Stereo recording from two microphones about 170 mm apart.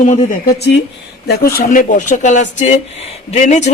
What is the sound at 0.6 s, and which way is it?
Speech, 80° left.